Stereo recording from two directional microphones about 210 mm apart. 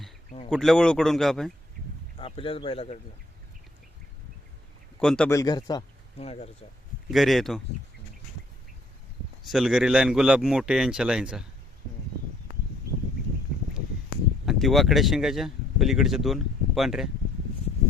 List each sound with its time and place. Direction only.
0.5 s a man's voice: centre (ahead or behind)
2.1 s speech: 25° left (ahead or behind)
4.9 s a man's voice: 5° left (ahead or behind)
5.4 s speech: 20° left (ahead or behind)
7.1 s a man's voice: centre (ahead or behind)
9.4 s a man's voice: centre (ahead or behind)
14.4 s speech: centre (ahead or behind)